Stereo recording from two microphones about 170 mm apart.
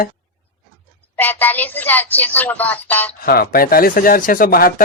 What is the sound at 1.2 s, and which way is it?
Speech, 10° left (ahead or behind).